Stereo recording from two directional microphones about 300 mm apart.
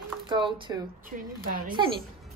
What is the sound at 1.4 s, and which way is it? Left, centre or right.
Speech, right.